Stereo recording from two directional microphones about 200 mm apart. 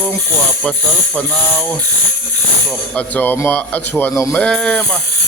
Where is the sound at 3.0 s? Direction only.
10° left (ahead or behind).